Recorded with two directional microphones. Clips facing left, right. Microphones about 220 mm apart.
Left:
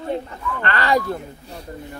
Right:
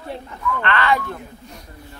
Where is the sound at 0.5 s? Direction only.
40° left (ahead or behind).